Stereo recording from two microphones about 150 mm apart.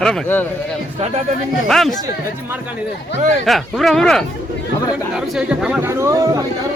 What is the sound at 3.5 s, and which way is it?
Speech, centre (ahead or behind).